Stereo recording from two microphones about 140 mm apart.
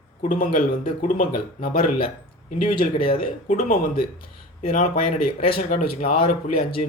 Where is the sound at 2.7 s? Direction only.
40° left (ahead or behind).